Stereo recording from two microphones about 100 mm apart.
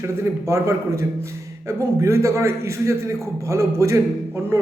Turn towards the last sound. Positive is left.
turn(degrees=-30)  # may be behind; listen again after turning